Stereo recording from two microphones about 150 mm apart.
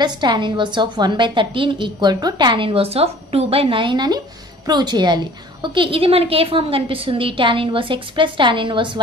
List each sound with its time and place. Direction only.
0.0 s a woman's voice: 30° right (ahead or behind)